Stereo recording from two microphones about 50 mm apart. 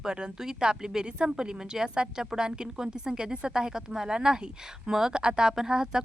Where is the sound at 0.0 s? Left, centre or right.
Centre.